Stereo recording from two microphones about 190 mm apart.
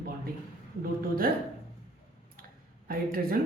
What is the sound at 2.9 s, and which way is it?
Speech, 50° right (ahead or behind).